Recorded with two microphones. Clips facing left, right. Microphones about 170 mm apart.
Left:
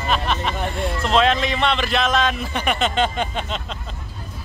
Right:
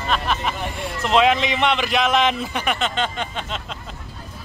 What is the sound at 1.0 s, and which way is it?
A man's voice, 15° right (ahead or behind).